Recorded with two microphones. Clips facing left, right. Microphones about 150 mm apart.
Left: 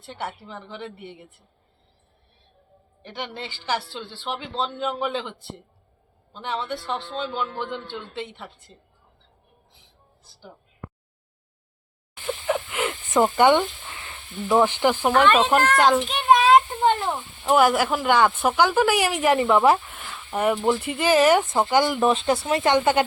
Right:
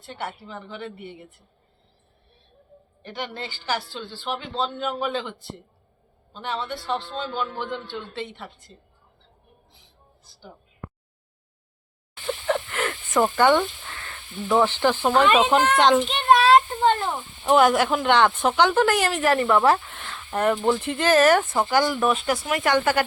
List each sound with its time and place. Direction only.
0.7 s speech: 20° left (ahead or behind)
3.0 s speech: 25° left (ahead or behind)
6.4 s speech: 20° left (ahead or behind)
12.2 s a sound: 5° left (ahead or behind)
15.1 s a child's voice: 10° right (ahead or behind)
16.0 s a sound: 5° left (ahead or behind)
17.0 s speech: centre (ahead or behind)
19.8 s speech: 5° left (ahead or behind)
22.0 s speech: 25° left (ahead or behind)